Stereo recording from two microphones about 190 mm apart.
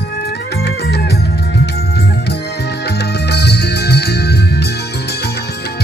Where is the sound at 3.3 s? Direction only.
60° left (ahead or behind).